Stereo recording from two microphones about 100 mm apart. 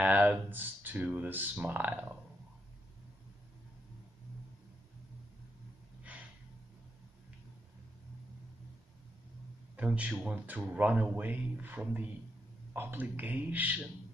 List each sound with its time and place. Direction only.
0.0 s speech: 15° right (ahead or behind)
9.8 s speech: 10° right (ahead or behind)